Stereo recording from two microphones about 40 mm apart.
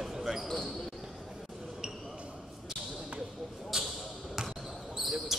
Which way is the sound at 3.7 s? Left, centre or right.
Centre.